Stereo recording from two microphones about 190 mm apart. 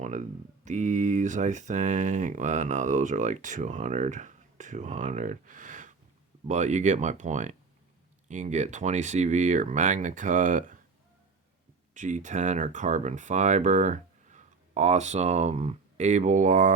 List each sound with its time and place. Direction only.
0.0 s speech: 40° right (ahead or behind)
11.9 s speech: 40° right (ahead or behind)